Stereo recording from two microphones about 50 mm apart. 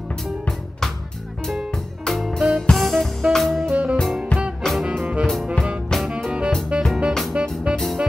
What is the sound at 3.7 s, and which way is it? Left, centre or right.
Music, right.